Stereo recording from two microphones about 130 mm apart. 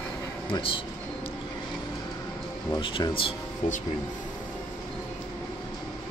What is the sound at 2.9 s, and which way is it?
Speech, 40° left (ahead or behind).